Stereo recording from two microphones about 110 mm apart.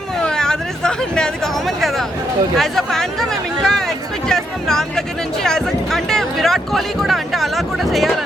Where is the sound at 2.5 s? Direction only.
5° left (ahead or behind).